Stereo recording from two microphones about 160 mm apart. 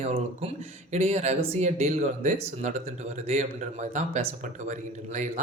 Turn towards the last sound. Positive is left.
turn(degrees=-50)  # may be behind; listen again after turning